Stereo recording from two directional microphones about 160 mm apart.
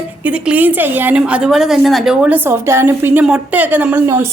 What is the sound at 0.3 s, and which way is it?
A woman's voice, 10° right (ahead or behind).